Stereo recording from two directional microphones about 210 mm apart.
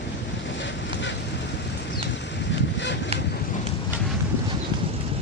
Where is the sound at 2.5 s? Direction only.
55° left (ahead or behind).